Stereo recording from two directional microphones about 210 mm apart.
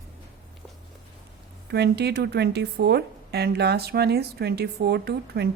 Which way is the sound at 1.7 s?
50° right (ahead or behind).